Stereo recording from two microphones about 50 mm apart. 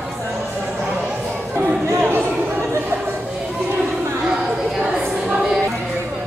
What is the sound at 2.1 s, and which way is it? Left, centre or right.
Chatter, right.